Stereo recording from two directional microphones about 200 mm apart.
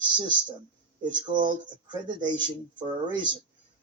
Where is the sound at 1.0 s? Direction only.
20° right (ahead or behind).